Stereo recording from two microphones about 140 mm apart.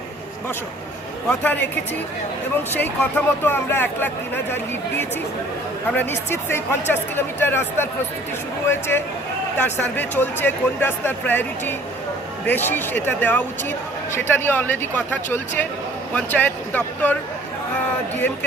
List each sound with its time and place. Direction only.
1.3 s speech: 10° left (ahead or behind)
2.7 s speech: 15° left (ahead or behind)
5.9 s speech: 15° left (ahead or behind)